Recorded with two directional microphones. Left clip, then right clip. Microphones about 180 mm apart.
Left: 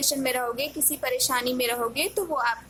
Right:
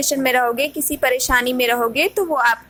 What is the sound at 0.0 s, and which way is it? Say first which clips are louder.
A woman's voice: right 9 dB; 20° right (ahead or behind).